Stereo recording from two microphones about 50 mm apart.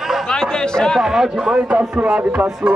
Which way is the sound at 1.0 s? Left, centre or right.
Centre.